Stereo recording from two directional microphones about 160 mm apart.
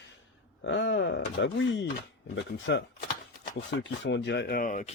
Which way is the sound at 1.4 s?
90° left.